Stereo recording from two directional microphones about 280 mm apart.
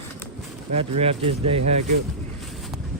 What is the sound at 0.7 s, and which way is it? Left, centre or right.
Speech, right.